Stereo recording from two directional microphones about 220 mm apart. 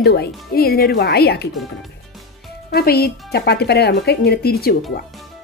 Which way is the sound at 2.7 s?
45° left (ahead or behind).